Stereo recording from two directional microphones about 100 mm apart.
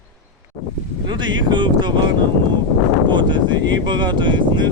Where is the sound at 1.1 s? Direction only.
50° right (ahead or behind).